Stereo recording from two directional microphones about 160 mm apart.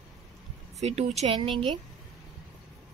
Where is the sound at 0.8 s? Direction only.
45° right (ahead or behind).